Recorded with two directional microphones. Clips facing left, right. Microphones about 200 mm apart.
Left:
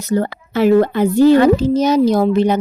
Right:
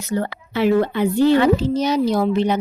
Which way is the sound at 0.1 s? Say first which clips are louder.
Left 5 dB; 40° left (ahead or behind).